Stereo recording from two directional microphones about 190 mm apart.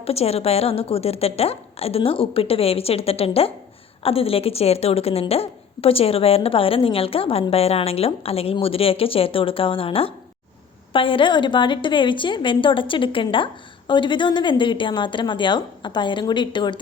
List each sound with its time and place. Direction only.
0.0 s a woman's voice: 30° left (ahead or behind)